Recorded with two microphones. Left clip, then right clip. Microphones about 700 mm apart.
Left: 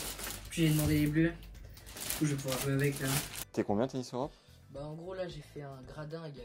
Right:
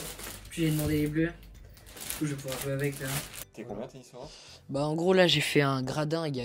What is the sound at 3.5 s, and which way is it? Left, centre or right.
Speech, left.